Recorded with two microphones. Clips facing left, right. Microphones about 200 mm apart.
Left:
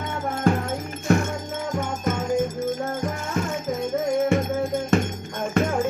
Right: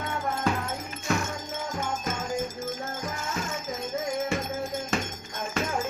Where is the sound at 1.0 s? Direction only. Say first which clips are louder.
Left 8 dB; 55° left (ahead or behind).